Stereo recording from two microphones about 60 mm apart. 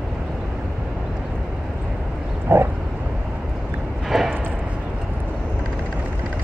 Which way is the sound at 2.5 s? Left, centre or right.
Right.